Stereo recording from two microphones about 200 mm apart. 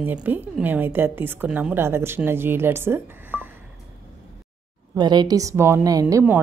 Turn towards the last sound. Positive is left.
turn(degrees=-15)  # may be behind; listen again after turning